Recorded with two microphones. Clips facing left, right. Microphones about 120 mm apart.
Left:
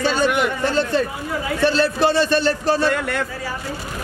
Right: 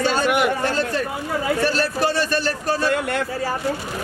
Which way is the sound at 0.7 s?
30° left (ahead or behind).